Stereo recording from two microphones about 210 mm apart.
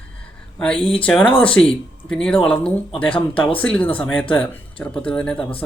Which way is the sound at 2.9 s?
25° left (ahead or behind).